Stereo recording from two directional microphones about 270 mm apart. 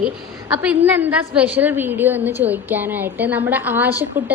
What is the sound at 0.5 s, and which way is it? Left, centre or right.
A woman's voice, centre.